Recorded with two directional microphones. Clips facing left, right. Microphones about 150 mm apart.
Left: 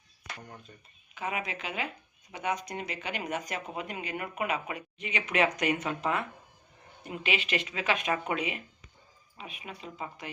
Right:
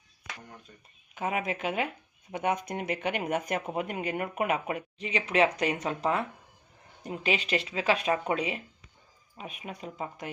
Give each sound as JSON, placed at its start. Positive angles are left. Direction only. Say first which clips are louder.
{"t": 1.1, "sound": "speech", "louder": "right 4 dB", "side_deg": -50}
{"t": 4.9, "sound": "speech", "louder": "right 3 dB", "side_deg": -30}
{"t": 9.4, "sound": "speech", "louder": "right 3 dB", "side_deg": -45}